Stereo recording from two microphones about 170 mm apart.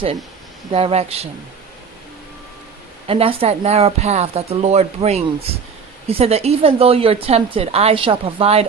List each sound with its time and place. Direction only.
0.7 s a woman's voice: 35° right (ahead or behind)
3.1 s a woman's voice: 35° right (ahead or behind)